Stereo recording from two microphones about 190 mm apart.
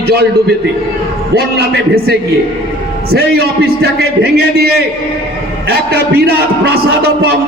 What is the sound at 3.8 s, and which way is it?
A man's voice, 55° right (ahead or behind).